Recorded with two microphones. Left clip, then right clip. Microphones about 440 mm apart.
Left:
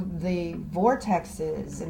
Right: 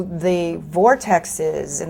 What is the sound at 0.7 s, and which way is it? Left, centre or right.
Speech, right.